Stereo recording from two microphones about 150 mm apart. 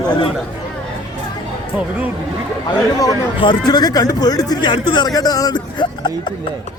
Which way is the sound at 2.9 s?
25° left (ahead or behind).